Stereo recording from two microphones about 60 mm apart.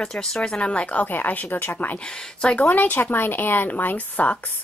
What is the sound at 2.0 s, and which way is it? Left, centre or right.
Speech, centre.